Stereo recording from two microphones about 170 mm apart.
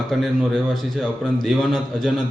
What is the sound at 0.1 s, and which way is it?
A man's voice, centre (ahead or behind).